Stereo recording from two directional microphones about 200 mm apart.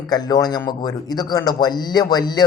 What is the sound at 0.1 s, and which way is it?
Speech, 20° left (ahead or behind).